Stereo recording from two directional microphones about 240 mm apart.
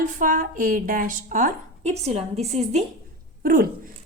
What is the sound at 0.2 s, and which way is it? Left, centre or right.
A woman's voice, right.